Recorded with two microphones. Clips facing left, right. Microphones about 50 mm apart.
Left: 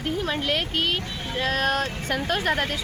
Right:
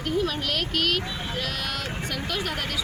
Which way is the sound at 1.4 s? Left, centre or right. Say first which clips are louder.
Left 10 dB; left.